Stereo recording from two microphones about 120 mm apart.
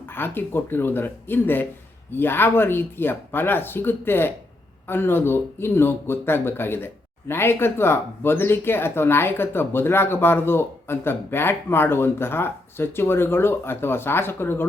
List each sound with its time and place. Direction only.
0.1 s speech: 20° left (ahead or behind)